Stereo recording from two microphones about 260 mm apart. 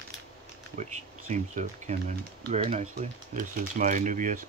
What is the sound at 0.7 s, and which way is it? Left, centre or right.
Speech, right.